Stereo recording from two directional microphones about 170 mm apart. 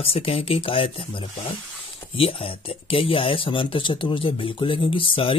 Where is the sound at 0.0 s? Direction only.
35° left (ahead or behind).